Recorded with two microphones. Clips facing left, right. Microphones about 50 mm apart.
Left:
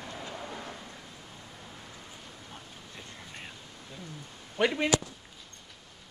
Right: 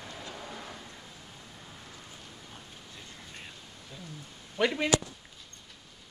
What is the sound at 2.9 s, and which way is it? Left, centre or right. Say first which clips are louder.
Vehicle: left 3 dB; centre.